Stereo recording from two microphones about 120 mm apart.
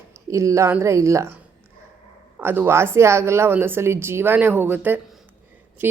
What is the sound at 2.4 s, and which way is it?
A woman's voice, 20° right (ahead or behind).